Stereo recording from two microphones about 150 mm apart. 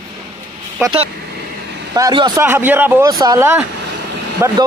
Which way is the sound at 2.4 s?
10° right (ahead or behind).